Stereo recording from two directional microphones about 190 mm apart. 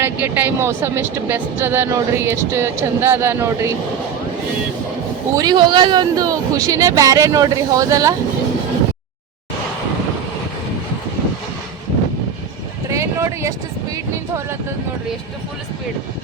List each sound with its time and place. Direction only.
0.0 s speech: 10° right (ahead or behind)
5.4 s speech: 25° right (ahead or behind)
12.9 s vehicle: 15° right (ahead or behind)